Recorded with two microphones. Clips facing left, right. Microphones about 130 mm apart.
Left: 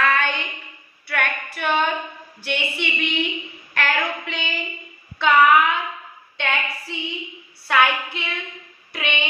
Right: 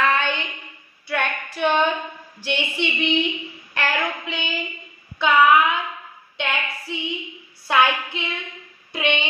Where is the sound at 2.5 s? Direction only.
20° right (ahead or behind).